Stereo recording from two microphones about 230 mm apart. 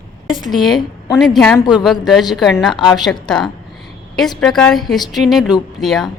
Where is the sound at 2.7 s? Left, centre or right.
Centre.